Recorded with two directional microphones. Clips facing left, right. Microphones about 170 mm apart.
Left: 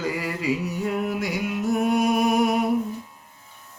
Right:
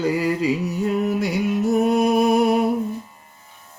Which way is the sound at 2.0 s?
35° right (ahead or behind).